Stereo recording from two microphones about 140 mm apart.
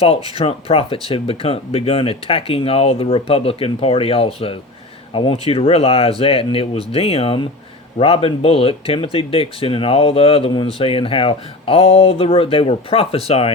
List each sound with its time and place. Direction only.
0.3 s speech: 45° left (ahead or behind)